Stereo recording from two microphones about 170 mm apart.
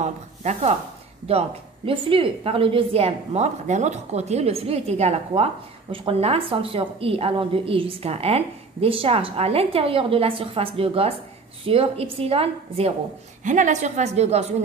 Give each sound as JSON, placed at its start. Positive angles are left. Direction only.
{"t": 0.0, "sound": "speech", "side_deg": -45}
{"t": 1.9, "sound": "a woman's voice", "side_deg": -30}
{"t": 13.4, "sound": "a woman's voice", "side_deg": -45}